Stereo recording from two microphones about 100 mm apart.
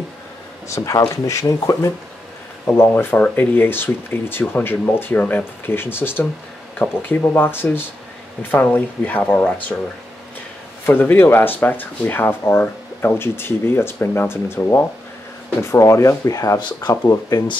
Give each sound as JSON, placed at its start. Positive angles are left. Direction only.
{"t": 0.7, "sound": "speech", "side_deg": 30}
{"t": 2.8, "sound": "speech", "side_deg": 20}
{"t": 10.9, "sound": "speech", "side_deg": 20}